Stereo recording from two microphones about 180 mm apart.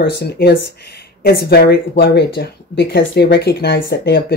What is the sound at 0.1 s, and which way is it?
Speech, 60° left (ahead or behind).